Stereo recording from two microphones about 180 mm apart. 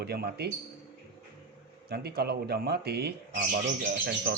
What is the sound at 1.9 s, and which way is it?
A man's voice, 60° right (ahead or behind).